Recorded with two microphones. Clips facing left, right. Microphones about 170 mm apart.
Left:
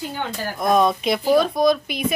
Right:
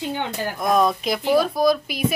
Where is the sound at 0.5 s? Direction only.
Centre (ahead or behind).